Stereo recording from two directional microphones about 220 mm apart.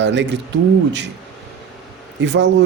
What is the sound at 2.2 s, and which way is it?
Speech, 55° right (ahead or behind).